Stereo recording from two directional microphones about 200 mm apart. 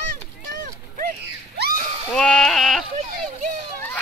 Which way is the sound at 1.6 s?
55° right (ahead or behind).